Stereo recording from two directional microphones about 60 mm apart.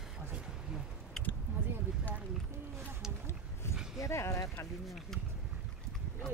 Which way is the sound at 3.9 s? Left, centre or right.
Left.